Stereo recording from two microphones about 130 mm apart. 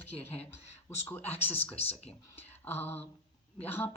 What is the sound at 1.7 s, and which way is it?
Speech, 50° left (ahead or behind).